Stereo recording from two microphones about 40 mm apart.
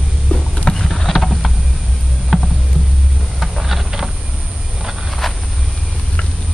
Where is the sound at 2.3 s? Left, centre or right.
Centre.